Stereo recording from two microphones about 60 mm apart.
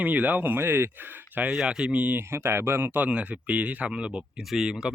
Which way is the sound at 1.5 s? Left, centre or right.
Centre.